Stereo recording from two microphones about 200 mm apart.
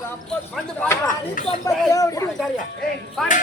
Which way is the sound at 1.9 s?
15° left (ahead or behind).